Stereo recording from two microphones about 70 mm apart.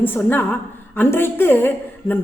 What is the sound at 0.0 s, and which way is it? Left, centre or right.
A woman's voice, left.